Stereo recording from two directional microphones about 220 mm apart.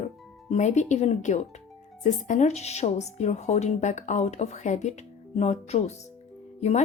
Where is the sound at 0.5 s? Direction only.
35° left (ahead or behind).